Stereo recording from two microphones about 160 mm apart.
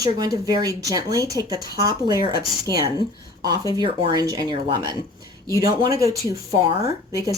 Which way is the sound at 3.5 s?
25° right (ahead or behind).